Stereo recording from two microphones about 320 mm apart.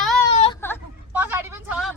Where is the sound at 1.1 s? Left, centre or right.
Centre.